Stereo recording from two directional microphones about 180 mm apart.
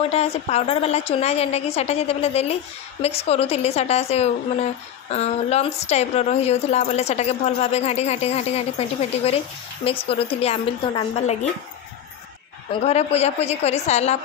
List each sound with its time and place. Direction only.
0.0 s a woman's voice: 35° left (ahead or behind)
9.8 s a woman's voice: 30° left (ahead or behind)
12.8 s a woman's voice: 35° left (ahead or behind)